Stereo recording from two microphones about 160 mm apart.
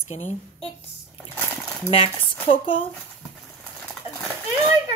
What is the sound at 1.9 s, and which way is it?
Speech, 35° left (ahead or behind).